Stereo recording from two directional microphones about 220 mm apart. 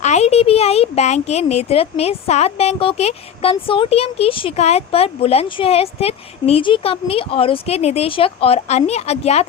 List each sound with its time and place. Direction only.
0.0 s speech: 30° left (ahead or behind)